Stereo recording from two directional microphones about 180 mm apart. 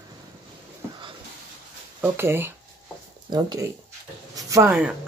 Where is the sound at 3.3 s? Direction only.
25° right (ahead or behind).